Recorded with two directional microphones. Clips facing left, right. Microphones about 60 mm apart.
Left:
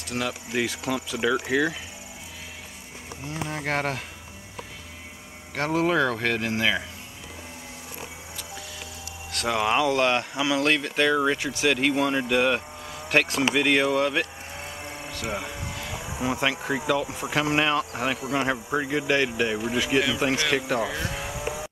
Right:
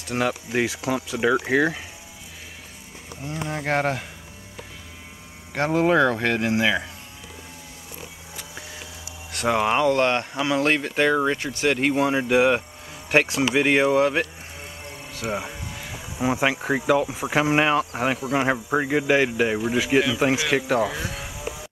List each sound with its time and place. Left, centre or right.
0.1 s speech: right
3.3 s speech: centre
5.5 s speech: centre
9.5 s speech: centre
9.8 s speech: centre
15.1 s a sound: centre
16.2 s speech: centre
19.6 s speech: centre
20.8 s vehicle: centre